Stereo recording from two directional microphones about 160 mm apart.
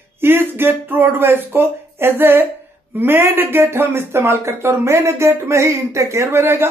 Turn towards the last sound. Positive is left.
turn(degrees=-15)  # may be behind; listen again after turning